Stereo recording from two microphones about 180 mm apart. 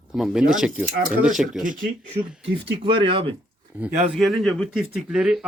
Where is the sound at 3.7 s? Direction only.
5° right (ahead or behind).